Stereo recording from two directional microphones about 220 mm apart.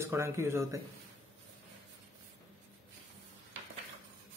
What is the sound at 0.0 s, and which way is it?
Speech, 10° right (ahead or behind).